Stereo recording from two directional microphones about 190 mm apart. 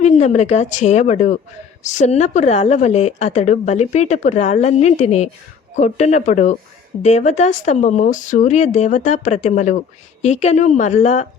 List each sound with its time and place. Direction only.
0.0 s a woman's voice: 35° left (ahead or behind)